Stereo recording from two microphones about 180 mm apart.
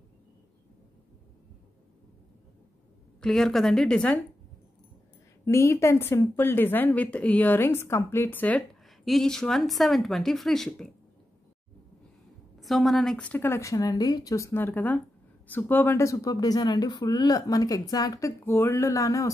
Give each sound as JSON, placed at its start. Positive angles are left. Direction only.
{"t": 3.2, "sound": "a woman's voice", "side_deg": 5}
{"t": 5.4, "sound": "a woman's voice", "side_deg": 15}
{"t": 12.5, "sound": "a woman's voice", "side_deg": 0}